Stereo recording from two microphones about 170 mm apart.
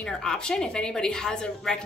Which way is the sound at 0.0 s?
5° left (ahead or behind).